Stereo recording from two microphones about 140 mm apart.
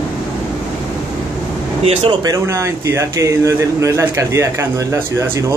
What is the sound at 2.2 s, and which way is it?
Speech, 20° right (ahead or behind).